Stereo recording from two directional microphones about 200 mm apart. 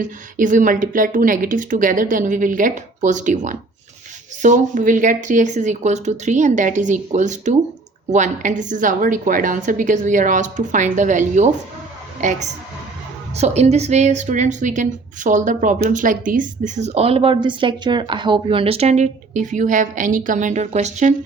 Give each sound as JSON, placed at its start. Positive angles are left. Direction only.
{"t": 0.0, "sound": "a woman's voice", "side_deg": -40}